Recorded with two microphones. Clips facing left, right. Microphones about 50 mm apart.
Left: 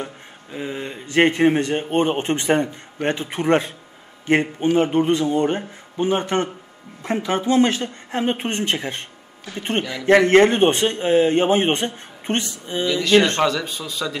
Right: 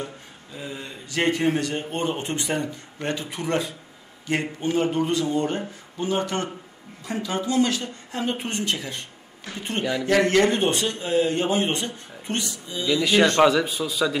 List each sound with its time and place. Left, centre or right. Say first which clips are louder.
0.0 s speech: left 2 dB; left
13.4 s speech: right 3 dB; centre